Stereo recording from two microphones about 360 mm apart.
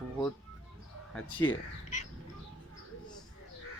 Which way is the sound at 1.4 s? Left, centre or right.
Centre.